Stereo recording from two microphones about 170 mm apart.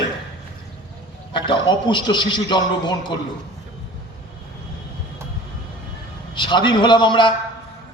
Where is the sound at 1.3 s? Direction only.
25° left (ahead or behind).